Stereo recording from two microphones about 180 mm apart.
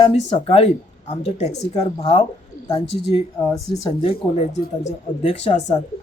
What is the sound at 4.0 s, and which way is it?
Speech, 35° left (ahead or behind).